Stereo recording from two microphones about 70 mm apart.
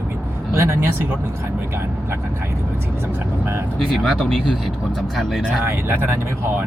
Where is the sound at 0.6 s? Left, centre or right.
Right.